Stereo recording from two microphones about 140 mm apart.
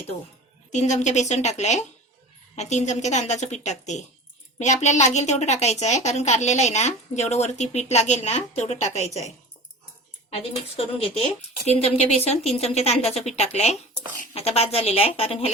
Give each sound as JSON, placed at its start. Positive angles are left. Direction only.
{"t": 0.7, "sound": "a woman's voice", "side_deg": 55}
{"t": 10.2, "sound": "speech", "side_deg": 45}